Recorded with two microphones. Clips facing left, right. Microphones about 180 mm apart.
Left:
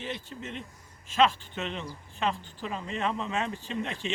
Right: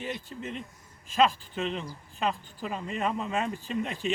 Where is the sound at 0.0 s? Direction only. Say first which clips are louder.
Right 2 dB; 35° right (ahead or behind).